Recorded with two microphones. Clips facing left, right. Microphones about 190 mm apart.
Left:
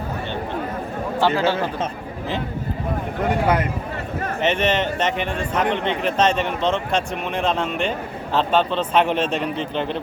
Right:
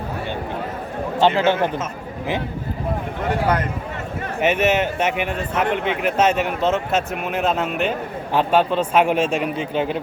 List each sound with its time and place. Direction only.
1.2 s speech: 20° right (ahead or behind)
4.4 s speech: 10° right (ahead or behind)